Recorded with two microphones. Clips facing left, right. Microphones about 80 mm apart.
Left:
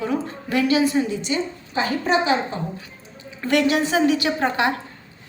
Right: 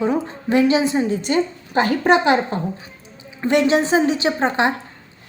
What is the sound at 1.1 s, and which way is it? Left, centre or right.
A woman's voice, right.